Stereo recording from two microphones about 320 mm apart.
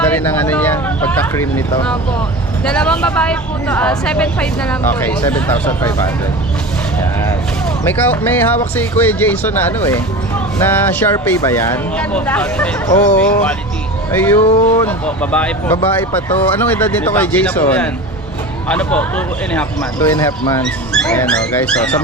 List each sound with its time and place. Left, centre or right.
0.0 s speech: centre
14.4 s speech: centre
14.8 s speech: centre